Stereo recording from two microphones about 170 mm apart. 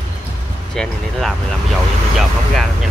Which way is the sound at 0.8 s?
5° left (ahead or behind).